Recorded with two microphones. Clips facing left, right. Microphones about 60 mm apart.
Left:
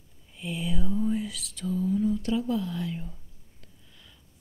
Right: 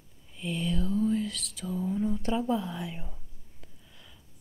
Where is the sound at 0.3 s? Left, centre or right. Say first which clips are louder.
Right 1 dB; centre.